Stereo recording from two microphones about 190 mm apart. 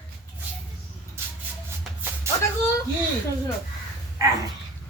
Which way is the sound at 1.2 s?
15° right (ahead or behind).